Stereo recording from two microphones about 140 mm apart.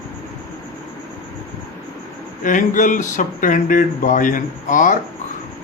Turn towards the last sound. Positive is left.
turn(degrees=70)  # may be behind; listen again after turning